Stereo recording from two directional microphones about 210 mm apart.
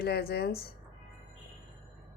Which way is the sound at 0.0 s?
50° left (ahead or behind).